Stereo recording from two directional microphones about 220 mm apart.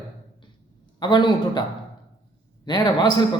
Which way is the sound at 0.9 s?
20° left (ahead or behind).